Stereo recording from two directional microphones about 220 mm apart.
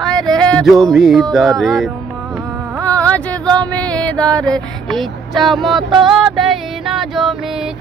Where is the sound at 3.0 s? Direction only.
5° left (ahead or behind).